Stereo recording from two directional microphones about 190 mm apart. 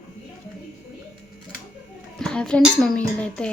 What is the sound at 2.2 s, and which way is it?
Speech, 5° left (ahead or behind).